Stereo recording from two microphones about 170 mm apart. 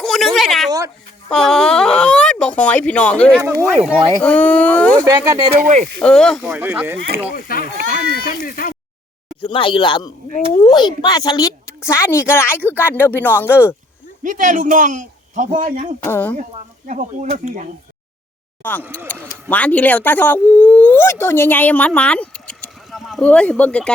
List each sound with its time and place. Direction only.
0.0 s a sound: centre (ahead or behind)
1.3 s speech: 5° left (ahead or behind)
5.0 s speech: 20° right (ahead or behind)
5.5 s speech: 45° right (ahead or behind)
6.0 s speech: 5° left (ahead or behind)
6.4 s speech: 10° right (ahead or behind)
7.3 s speech: 60° left (ahead or behind)
9.4 s a woman's voice: 30° left (ahead or behind); by 13.7 s 15° left (ahead or behind)
14.3 s speech: 50° right (ahead or behind)
16.0 s speech: 10° left (ahead or behind)
16.4 s speech: 50° right (ahead or behind)
18.9 s speech: 10° left (ahead or behind)